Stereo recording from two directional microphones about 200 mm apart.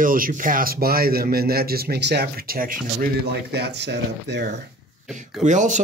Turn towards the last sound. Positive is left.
turn(degrees=-40)  # may be behind; listen again after turning